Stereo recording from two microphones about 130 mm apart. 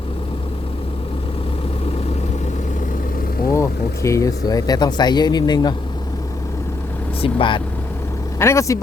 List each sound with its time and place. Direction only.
3.5 s speech: 20° left (ahead or behind)
7.2 s speech: 40° left (ahead or behind)
8.4 s speech: 20° left (ahead or behind)